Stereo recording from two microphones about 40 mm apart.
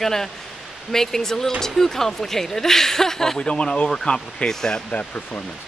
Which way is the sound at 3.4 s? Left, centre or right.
Left.